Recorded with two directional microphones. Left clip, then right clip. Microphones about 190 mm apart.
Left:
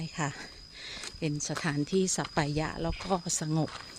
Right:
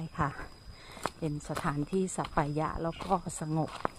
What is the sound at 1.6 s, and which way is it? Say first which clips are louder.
Speech: left 3 dB; 35° left (ahead or behind).